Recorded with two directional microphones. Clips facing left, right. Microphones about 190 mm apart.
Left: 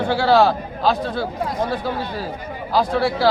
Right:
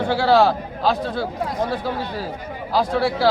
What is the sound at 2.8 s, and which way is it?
Speech, 10° right (ahead or behind).